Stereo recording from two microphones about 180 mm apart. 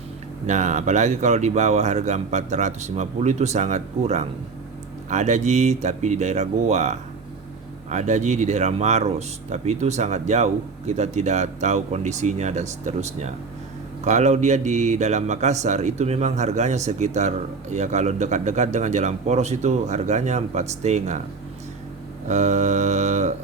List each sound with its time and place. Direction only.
0.4 s a man's voice: 40° right (ahead or behind)
22.3 s a man's voice: 40° right (ahead or behind)